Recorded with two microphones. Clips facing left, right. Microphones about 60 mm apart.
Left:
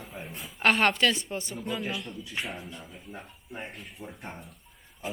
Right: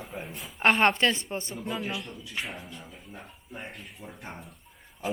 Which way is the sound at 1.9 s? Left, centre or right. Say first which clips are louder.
Even; centre.